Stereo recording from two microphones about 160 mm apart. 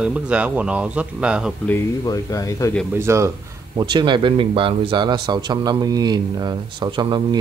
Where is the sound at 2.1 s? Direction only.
20° left (ahead or behind).